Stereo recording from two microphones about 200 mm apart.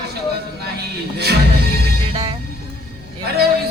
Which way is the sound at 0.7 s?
55° right (ahead or behind).